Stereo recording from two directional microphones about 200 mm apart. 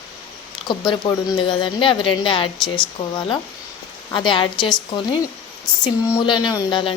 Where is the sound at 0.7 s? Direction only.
20° left (ahead or behind).